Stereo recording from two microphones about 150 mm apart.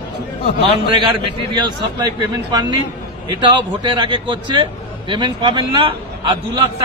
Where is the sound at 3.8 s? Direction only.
30° right (ahead or behind).